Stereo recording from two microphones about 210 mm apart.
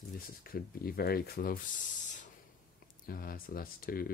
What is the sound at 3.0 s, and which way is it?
Speech, 45° left (ahead or behind).